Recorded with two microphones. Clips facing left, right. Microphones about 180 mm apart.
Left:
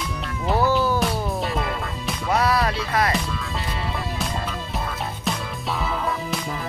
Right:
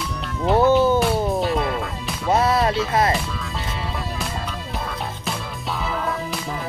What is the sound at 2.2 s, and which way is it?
Music, 25° right (ahead or behind).